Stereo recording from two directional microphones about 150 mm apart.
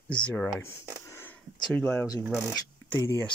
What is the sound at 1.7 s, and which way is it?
Speech, 10° left (ahead or behind).